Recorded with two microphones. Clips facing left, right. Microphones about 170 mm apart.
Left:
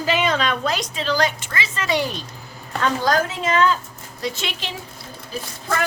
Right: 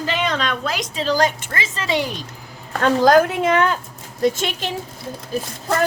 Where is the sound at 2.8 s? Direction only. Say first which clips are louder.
Right 6 dB; 55° right (ahead or behind).